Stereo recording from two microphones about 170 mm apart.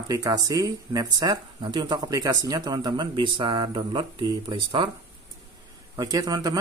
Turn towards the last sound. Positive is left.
turn(degrees=-20)  # may be behind; listen again after turning